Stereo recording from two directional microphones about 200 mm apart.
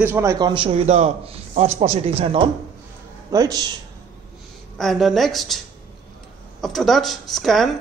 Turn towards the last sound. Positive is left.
turn(degrees=0)  # may be behind; listen again after turning